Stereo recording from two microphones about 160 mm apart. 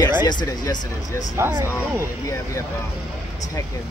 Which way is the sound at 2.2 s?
20° left (ahead or behind).